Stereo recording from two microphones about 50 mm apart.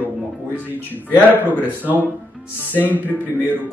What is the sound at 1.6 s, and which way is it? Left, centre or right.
Speech, right.